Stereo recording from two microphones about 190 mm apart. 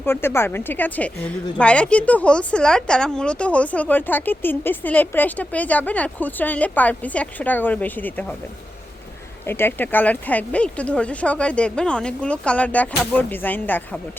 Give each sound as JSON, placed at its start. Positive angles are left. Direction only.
{"t": 0.0, "sound": "speech", "side_deg": 10}
{"t": 9.5, "sound": "speech", "side_deg": 10}